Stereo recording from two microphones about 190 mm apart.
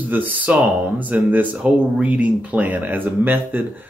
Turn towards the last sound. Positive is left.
turn(degrees=-10)  # may be behind; listen again after turning